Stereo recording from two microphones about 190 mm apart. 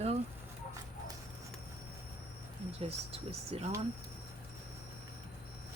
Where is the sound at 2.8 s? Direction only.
30° right (ahead or behind).